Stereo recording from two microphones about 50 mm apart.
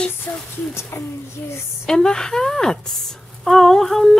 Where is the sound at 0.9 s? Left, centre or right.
Left.